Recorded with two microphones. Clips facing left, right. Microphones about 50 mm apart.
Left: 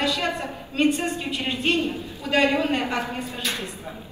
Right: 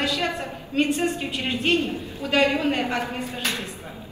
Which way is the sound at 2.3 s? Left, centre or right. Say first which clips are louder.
Even; left.